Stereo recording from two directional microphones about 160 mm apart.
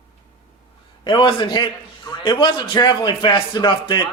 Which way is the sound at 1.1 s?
30° left (ahead or behind).